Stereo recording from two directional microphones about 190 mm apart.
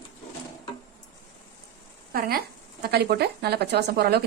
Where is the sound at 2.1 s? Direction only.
50° right (ahead or behind).